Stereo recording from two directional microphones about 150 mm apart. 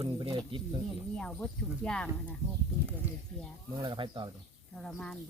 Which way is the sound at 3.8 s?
35° right (ahead or behind).